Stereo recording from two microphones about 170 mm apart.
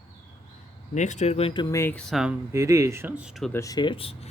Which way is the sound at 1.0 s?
45° left (ahead or behind).